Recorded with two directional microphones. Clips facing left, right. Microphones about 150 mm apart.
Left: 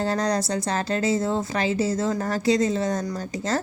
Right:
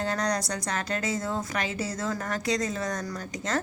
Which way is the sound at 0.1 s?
30° left (ahead or behind).